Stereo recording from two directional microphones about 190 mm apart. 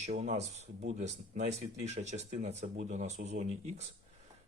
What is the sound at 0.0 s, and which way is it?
Speech, 40° right (ahead or behind).